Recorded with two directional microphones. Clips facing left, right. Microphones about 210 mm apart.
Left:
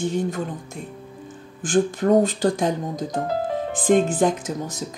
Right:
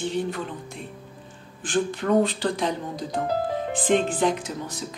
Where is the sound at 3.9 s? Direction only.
45° left (ahead or behind).